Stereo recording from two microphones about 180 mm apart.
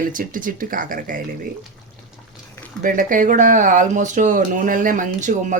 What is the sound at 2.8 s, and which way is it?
Speech, 45° right (ahead or behind).